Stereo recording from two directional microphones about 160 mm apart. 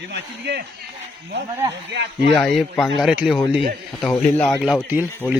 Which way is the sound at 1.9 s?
90° right.